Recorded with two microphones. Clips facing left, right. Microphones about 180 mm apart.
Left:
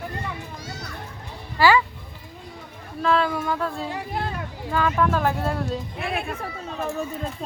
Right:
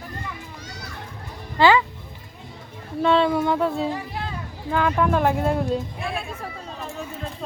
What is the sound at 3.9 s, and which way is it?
Hubbub, 65° left (ahead or behind).